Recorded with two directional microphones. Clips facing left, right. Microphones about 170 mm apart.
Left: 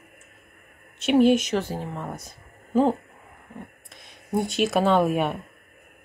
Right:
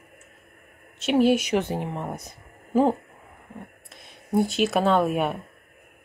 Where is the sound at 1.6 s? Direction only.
20° right (ahead or behind); by 5.4 s centre (ahead or behind).